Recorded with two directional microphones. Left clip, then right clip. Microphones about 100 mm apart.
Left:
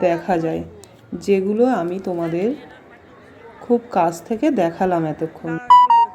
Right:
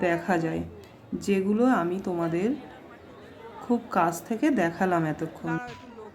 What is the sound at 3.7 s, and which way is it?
A woman's voice, 15° left (ahead or behind).